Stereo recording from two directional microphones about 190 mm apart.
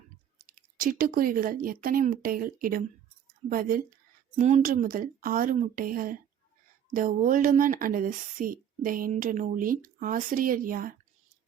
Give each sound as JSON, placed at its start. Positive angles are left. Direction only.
{"t": 0.4, "sound": "speech", "side_deg": -50}
{"t": 4.4, "sound": "speech", "side_deg": -40}